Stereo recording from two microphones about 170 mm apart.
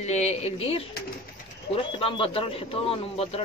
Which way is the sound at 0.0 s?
40° left (ahead or behind).